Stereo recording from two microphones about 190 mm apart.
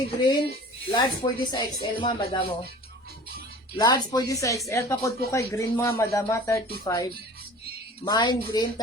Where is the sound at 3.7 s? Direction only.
20° left (ahead or behind).